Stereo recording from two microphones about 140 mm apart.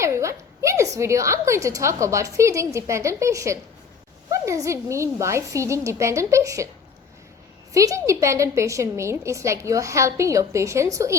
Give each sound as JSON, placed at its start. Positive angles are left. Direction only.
{"t": 0.0, "sound": "a woman's voice", "side_deg": -20}
{"t": 7.7, "sound": "a woman's voice", "side_deg": -25}